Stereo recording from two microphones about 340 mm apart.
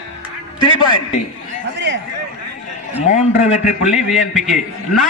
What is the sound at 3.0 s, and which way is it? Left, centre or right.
Speech, left.